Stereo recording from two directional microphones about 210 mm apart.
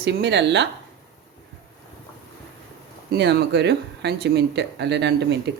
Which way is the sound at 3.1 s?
55° right (ahead or behind).